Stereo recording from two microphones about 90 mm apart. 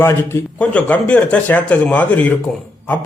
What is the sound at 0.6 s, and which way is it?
Speech, 15° left (ahead or behind).